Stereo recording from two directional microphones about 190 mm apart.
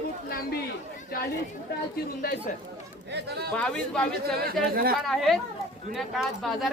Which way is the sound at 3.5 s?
5° left (ahead or behind).